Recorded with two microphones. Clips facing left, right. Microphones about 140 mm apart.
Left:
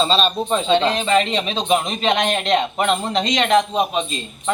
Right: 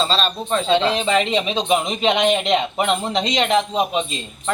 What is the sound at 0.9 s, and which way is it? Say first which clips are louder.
Speech: even; 15° right (ahead or behind).